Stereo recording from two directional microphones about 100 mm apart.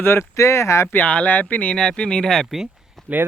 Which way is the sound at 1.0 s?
15° left (ahead or behind).